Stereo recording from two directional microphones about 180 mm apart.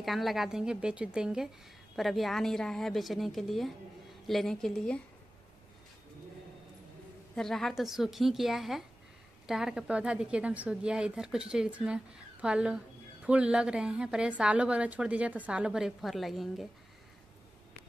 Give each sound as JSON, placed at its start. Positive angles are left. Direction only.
{"t": 0.0, "sound": "a woman's voice", "side_deg": 0}
{"t": 7.3, "sound": "a woman's voice", "side_deg": 0}